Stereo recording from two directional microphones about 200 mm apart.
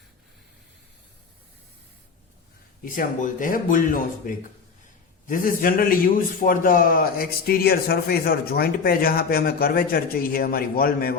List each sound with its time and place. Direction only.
2.8 s a man's voice: 45° left (ahead or behind)